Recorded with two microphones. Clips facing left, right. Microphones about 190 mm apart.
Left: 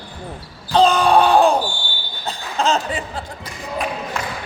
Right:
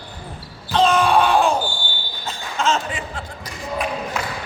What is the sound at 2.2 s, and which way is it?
Speech, 35° left (ahead or behind).